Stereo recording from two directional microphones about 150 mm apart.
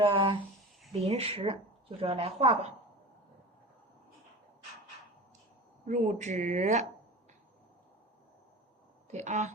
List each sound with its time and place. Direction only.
0.0 s speech: 35° right (ahead or behind)
5.8 s speech: 50° right (ahead or behind)
9.1 s speech: 50° right (ahead or behind)